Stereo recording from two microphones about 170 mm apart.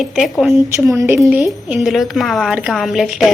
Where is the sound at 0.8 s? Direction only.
15° right (ahead or behind).